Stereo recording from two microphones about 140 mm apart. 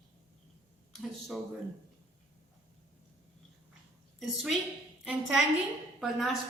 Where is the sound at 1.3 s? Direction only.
Centre (ahead or behind).